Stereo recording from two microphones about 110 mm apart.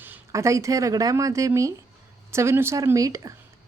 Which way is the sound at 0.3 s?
30° right (ahead or behind).